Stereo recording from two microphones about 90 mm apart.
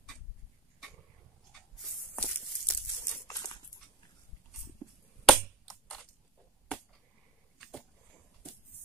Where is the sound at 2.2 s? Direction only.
15° left (ahead or behind).